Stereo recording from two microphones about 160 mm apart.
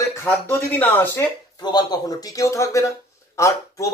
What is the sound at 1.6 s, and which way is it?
Speech, 25° left (ahead or behind).